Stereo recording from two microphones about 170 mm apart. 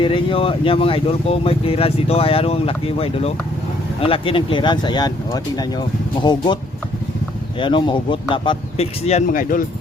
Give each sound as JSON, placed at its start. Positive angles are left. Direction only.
{"t": 0.0, "sound": "speech", "side_deg": 30}
{"t": 7.6, "sound": "speech", "side_deg": 30}